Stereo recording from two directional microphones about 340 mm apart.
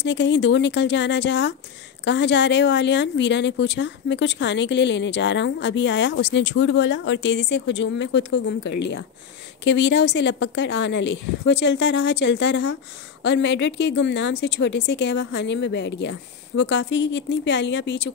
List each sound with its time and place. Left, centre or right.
0.0 s speech: left